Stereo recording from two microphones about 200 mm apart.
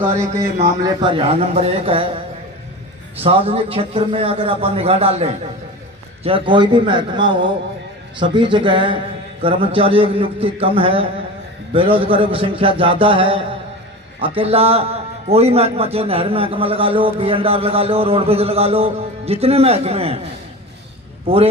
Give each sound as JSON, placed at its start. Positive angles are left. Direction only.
{"t": 0.8, "sound": "a man's voice", "side_deg": -25}
{"t": 3.2, "sound": "a man's voice", "side_deg": -30}